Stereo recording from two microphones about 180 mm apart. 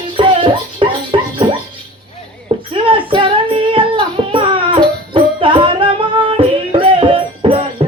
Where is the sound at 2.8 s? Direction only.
30° right (ahead or behind).